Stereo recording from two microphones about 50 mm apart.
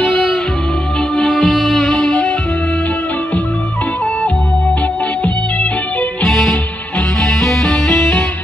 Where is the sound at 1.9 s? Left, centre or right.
Left.